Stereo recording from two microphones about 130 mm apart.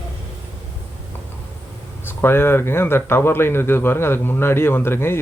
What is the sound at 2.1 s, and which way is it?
Speech, 15° left (ahead or behind).